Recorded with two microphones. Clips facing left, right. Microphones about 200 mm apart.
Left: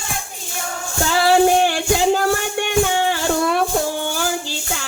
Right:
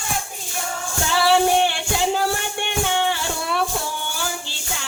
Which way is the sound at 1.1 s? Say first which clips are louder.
Left 3 dB; 45° left (ahead or behind).